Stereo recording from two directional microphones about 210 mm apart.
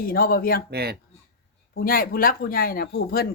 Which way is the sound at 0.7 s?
50° right (ahead or behind).